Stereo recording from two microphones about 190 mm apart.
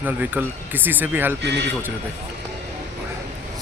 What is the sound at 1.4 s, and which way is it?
Speech, 65° right (ahead or behind).